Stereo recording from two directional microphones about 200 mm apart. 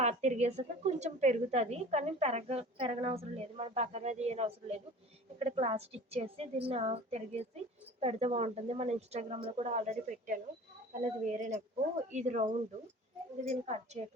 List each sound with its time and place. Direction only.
0.0 s a woman's voice: 35° right (ahead or behind)